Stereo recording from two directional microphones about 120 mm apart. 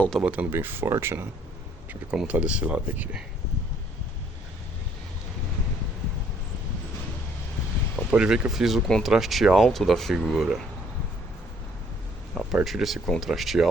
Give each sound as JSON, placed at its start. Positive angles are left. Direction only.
{"t": 0.2, "sound": "speech", "side_deg": -10}
{"t": 1.9, "sound": "speech", "side_deg": -10}
{"t": 8.1, "sound": "speech", "side_deg": -10}
{"t": 12.3, "sound": "speech", "side_deg": 0}